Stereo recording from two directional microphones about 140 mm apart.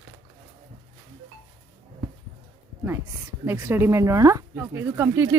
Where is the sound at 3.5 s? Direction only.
15° right (ahead or behind).